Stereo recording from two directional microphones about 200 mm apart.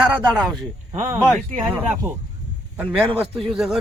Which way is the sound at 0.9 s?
35° right (ahead or behind).